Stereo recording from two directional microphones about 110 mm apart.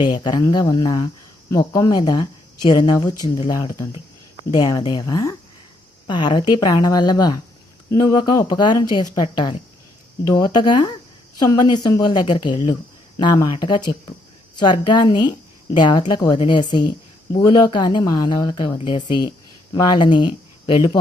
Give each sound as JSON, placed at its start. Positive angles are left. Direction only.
{"t": 0.0, "sound": "speech", "side_deg": 40}
{"t": 6.1, "sound": "speech", "side_deg": 45}